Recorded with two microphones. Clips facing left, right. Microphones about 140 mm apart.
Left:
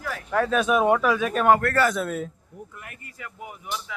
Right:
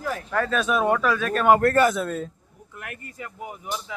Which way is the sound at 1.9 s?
5° left (ahead or behind).